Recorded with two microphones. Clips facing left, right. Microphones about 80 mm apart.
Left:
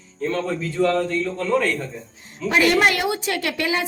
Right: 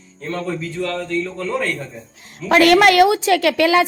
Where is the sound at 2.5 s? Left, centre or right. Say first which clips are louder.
Right 6 dB; right.